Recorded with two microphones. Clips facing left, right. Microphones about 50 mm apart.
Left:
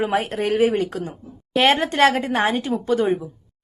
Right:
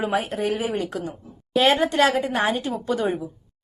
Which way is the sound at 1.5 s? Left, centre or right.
Left.